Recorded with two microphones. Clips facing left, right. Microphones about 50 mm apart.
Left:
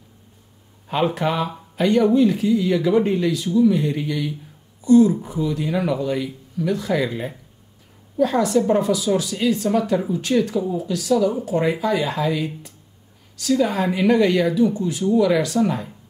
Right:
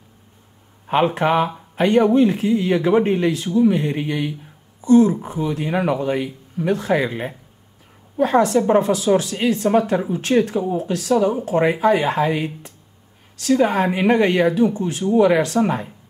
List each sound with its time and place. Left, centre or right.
0.8 s a woman's voice: right